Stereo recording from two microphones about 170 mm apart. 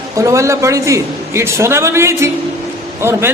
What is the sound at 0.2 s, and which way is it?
A man's voice, 15° right (ahead or behind).